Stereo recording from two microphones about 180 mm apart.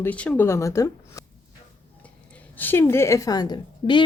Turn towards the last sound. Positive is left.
turn(degrees=25)  # may be behind; listen again after turning